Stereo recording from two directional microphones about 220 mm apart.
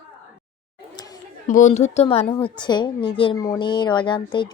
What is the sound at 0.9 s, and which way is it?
Chatter, 15° left (ahead or behind).